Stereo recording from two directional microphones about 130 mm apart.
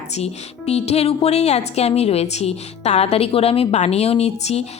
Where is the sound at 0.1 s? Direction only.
55° left (ahead or behind).